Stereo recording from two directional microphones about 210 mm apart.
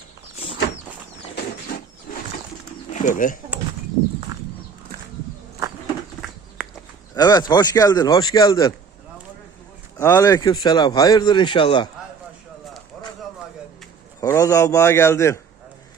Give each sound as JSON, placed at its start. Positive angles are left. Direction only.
{"t": 3.0, "sound": "speech", "side_deg": 40}
{"t": 6.6, "sound": "livestock", "side_deg": -5}
{"t": 7.1, "sound": "speech", "side_deg": 20}
{"t": 10.0, "sound": "speech", "side_deg": 15}
{"t": 14.2, "sound": "speech", "side_deg": 15}